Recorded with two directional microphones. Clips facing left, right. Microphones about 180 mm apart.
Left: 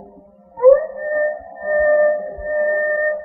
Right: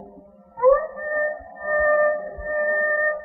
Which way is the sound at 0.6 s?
30° left (ahead or behind).